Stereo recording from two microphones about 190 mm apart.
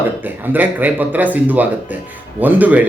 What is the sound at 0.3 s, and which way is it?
A man's voice, 10° right (ahead or behind).